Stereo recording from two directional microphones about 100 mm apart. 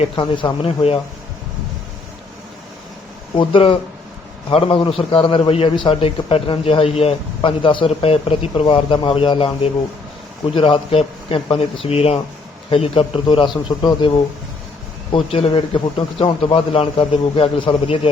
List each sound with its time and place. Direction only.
0.0 s a man's voice: 55° left (ahead or behind); by 0.9 s 75° left (ahead or behind)
3.3 s a man's voice: 60° left (ahead or behind)
10.5 s a man's voice: 60° left (ahead or behind); by 12.2 s 90° left
12.7 s a man's voice: 70° left (ahead or behind); by 13.6 s 55° left (ahead or behind)
15.1 s a man's voice: 70° left (ahead or behind)